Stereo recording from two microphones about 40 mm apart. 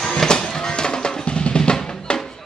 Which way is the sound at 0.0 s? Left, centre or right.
Centre.